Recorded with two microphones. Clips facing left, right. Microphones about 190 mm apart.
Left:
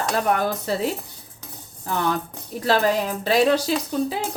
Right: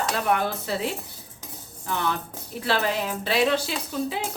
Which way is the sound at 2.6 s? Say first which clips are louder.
Left 5 dB; 40° left (ahead or behind).